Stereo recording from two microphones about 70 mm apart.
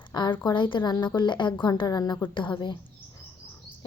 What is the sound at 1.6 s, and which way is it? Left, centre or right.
Speech, left.